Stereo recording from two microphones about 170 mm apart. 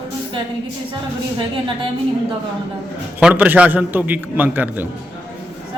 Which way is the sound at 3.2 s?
10° right (ahead or behind).